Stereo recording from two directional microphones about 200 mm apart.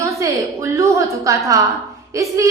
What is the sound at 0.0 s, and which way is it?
A woman's voice, 15° right (ahead or behind).